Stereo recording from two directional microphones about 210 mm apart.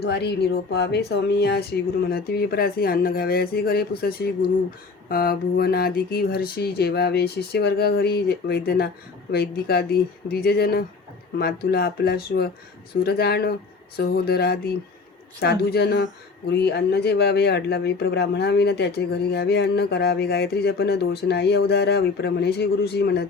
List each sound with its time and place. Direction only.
0.0 s speech: 50° left (ahead or behind)